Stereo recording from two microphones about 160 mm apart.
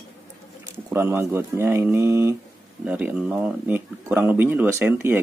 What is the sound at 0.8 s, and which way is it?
Speech, 15° right (ahead or behind).